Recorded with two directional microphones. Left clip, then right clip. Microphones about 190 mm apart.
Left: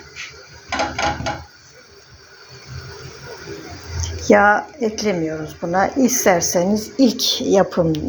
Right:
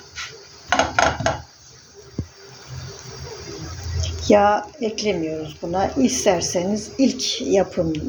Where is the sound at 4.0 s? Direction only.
10° left (ahead or behind).